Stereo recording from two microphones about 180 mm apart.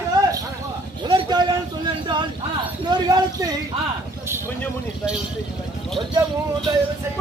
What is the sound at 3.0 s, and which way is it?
Clip-clop, 20° right (ahead or behind).